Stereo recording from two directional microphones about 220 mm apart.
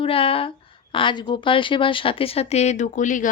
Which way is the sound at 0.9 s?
20° left (ahead or behind).